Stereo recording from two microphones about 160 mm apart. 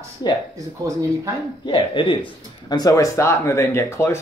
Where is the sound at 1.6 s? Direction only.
30° left (ahead or behind).